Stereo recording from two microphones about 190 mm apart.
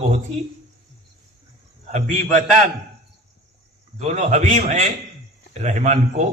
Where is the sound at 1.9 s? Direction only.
40° right (ahead or behind).